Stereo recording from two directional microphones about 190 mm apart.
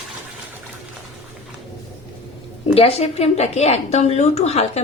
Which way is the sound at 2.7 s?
30° left (ahead or behind).